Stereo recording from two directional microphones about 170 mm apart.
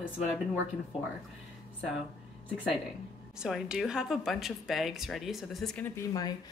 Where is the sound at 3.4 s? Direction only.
5° right (ahead or behind).